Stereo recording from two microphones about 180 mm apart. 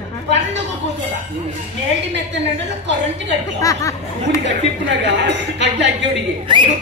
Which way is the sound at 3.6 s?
15° left (ahead or behind).